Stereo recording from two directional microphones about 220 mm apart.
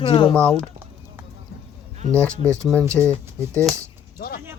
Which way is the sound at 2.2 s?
15° right (ahead or behind).